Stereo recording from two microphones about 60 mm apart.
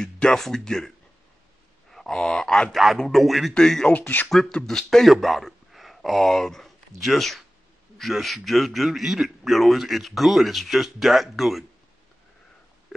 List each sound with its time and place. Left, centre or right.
0.0 s speech: centre
1.9 s a sound: centre
2.1 s speech: centre
2.7 s a man's voice: centre
3.5 s a man's voice: centre